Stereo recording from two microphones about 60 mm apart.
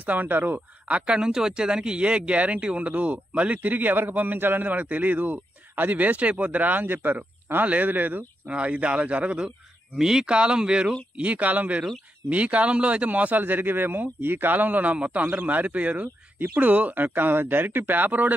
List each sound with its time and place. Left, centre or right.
0.0 s speech: right
0.8 s speech: centre
8.5 s speech: right
9.9 s speech: centre; by 18.3 s right